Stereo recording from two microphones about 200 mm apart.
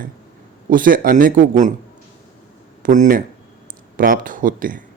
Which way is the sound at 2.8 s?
40° right (ahead or behind).